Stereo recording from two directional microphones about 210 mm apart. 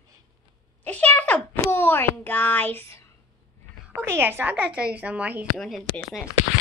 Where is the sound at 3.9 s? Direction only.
10° right (ahead or behind).